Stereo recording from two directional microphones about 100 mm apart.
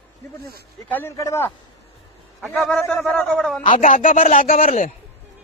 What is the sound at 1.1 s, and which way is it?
Speech, 30° left (ahead or behind).